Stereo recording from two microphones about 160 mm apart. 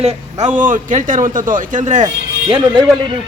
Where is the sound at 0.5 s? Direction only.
55° right (ahead or behind).